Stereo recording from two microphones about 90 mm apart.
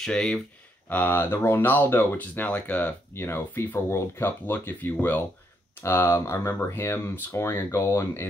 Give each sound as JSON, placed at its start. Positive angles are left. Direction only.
{"t": 0.0, "sound": "speech", "side_deg": 10}
{"t": 0.8, "sound": "speech", "side_deg": 20}